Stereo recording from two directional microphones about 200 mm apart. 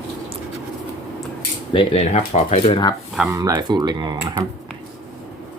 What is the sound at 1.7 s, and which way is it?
Speech, 25° left (ahead or behind).